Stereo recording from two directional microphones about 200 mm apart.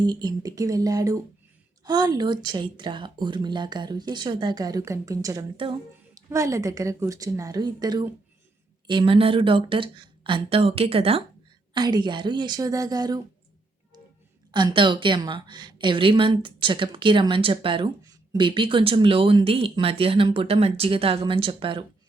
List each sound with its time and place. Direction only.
0.0 s a woman's voice: 20° right (ahead or behind)
14.5 s a woman's voice: 25° right (ahead or behind)